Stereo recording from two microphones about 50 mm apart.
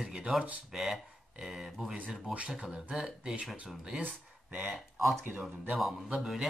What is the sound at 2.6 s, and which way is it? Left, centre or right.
Speech, centre.